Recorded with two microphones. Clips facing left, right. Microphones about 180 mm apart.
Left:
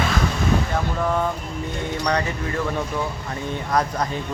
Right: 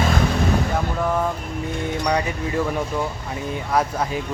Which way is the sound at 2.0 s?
10° right (ahead or behind).